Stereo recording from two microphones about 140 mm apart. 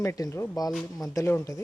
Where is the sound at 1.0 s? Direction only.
20° left (ahead or behind).